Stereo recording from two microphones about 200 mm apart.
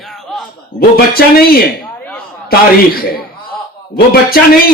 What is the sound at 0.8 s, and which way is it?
Speech, 50° left (ahead or behind).